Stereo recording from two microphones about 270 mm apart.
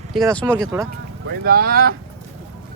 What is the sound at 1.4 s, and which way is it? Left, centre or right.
Speech, right.